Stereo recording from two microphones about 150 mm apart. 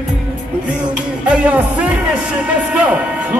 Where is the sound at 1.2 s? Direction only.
10° right (ahead or behind).